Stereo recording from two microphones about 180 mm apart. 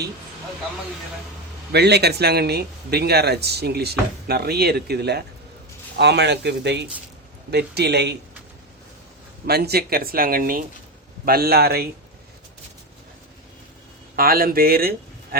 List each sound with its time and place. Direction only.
1.7 s speech: 65° right (ahead or behind)
9.5 s speech: 60° right (ahead or behind)
14.2 s speech: 55° right (ahead or behind)